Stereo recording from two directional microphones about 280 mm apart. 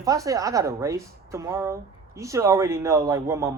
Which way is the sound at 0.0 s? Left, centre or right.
Centre.